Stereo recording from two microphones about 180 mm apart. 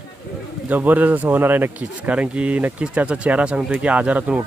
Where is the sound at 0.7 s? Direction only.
10° right (ahead or behind).